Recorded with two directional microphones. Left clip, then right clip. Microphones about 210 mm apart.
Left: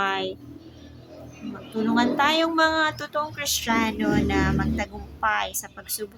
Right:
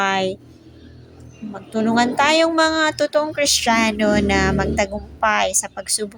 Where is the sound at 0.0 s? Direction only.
30° right (ahead or behind).